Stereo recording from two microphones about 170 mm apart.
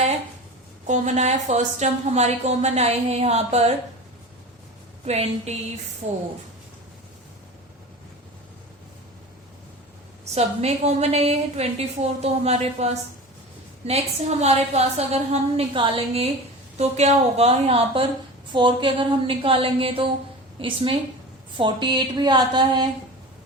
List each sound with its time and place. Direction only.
0.9 s a woman's voice: 45° right (ahead or behind)
5.0 s a woman's voice: 40° right (ahead or behind)
10.3 s a woman's voice: 40° right (ahead or behind)
21.6 s speech: 25° right (ahead or behind)